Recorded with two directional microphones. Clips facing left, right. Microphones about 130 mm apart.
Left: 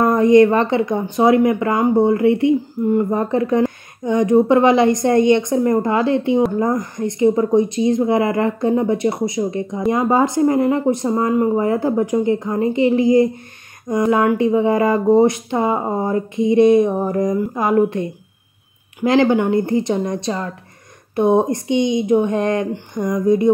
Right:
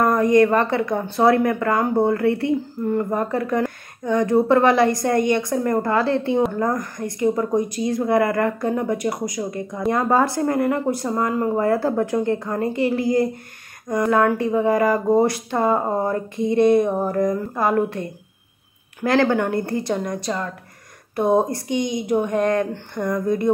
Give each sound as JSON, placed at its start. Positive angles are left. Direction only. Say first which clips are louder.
{"t": 0.0, "sound": "a woman's voice", "louder": "left 4 dB", "side_deg": 20}